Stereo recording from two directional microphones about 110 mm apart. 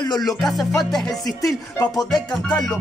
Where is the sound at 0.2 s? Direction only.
Centre (ahead or behind).